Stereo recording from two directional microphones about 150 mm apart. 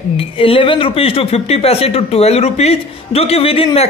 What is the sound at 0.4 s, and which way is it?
Speech, 35° left (ahead or behind).